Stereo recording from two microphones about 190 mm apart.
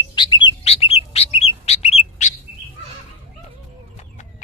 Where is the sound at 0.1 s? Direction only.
25° left (ahead or behind).